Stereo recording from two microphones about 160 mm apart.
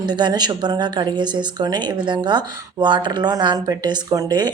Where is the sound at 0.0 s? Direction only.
25° right (ahead or behind).